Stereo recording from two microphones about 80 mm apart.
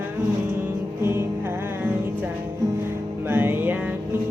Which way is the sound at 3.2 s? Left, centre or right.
Right.